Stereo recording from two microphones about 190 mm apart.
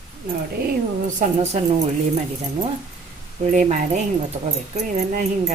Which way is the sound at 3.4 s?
40° right (ahead or behind).